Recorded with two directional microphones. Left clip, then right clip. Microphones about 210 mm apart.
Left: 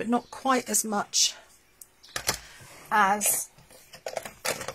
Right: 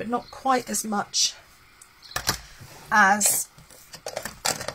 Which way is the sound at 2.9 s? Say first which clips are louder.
Right 4 dB; 30° left (ahead or behind).